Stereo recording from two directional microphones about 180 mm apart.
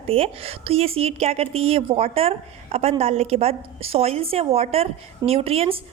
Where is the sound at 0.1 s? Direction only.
30° right (ahead or behind).